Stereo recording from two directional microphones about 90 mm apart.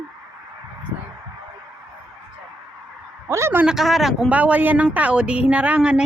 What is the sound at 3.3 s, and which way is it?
Speech, 30° right (ahead or behind).